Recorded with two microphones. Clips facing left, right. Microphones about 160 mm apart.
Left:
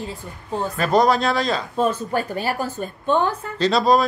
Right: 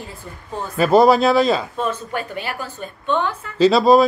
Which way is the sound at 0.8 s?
5° right (ahead or behind).